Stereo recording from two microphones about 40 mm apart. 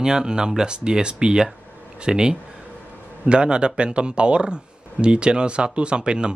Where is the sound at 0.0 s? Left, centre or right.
Centre.